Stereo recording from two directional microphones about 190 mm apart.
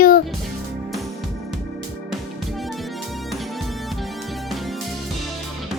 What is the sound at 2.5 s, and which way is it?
Music, centre (ahead or behind).